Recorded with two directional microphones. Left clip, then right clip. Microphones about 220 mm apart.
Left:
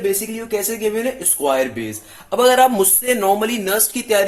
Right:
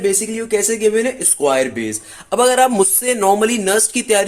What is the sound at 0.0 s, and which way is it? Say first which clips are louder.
A woman's voice: right 3 dB; 30° right (ahead or behind).